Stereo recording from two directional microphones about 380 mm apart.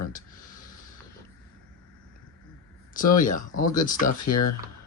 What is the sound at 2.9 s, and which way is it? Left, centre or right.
Speech, left.